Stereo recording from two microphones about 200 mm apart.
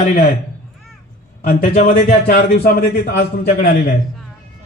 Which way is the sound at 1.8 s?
45° left (ahead or behind).